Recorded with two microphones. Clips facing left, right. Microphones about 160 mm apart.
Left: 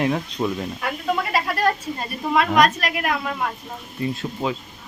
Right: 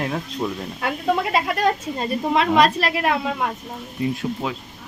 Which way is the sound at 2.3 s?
25° right (ahead or behind).